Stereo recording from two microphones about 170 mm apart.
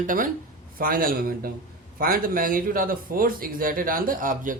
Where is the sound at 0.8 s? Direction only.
60° right (ahead or behind).